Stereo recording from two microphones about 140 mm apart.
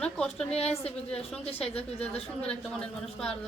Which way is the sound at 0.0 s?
5° left (ahead or behind).